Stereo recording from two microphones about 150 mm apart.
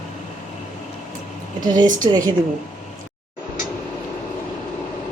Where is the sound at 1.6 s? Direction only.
30° right (ahead or behind).